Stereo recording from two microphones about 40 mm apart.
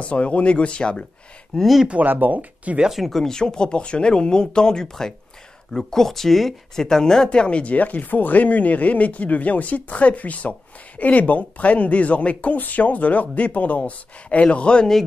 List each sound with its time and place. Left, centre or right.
0.0 s speech: left
2.0 s speech: right
3.1 s speech: centre
7.2 s speech: left
7.7 s speech: left